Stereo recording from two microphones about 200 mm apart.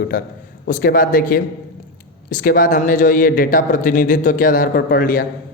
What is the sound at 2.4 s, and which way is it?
A man's voice, 45° left (ahead or behind).